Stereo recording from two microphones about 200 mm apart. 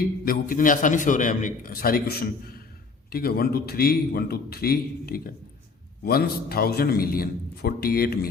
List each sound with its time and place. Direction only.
0.0 s a man's voice: 45° left (ahead or behind)